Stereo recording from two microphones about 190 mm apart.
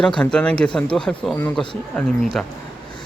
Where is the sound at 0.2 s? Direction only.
5° left (ahead or behind).